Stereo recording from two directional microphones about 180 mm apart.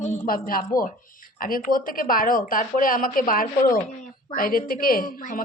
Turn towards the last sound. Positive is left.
turn(degrees=50)  # may be behind; listen again after turning